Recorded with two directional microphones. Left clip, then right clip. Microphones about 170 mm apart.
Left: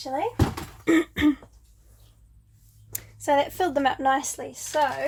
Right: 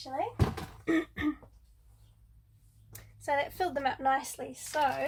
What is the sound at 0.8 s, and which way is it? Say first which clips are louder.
Throat clearing: left 9 dB; 65° left (ahead or behind).